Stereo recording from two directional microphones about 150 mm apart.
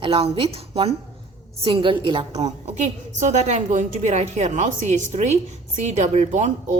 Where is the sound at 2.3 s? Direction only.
45° right (ahead or behind).